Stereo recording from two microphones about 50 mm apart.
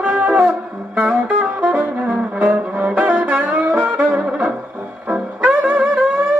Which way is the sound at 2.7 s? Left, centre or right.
Right.